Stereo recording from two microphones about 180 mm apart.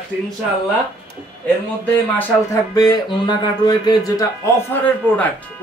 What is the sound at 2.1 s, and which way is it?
Speech, 20° left (ahead or behind).